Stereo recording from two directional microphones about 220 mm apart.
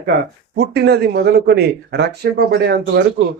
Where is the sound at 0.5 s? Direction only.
50° right (ahead or behind).